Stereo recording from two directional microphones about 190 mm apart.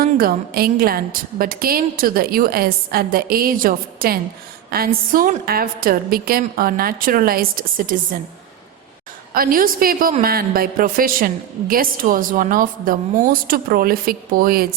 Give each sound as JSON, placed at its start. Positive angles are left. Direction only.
{"t": 0.0, "sound": "a woman's voice", "side_deg": -50}
{"t": 9.3, "sound": "a woman's voice", "side_deg": -50}